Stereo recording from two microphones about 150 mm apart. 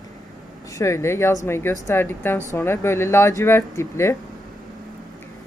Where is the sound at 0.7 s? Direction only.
20° left (ahead or behind).